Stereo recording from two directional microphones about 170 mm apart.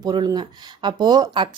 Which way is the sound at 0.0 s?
25° right (ahead or behind).